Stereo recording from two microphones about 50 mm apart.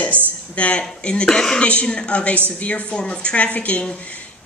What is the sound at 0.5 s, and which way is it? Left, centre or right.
Speech, left.